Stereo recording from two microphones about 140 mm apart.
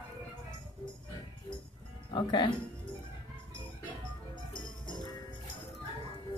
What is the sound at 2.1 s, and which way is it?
Speech, 35° left (ahead or behind).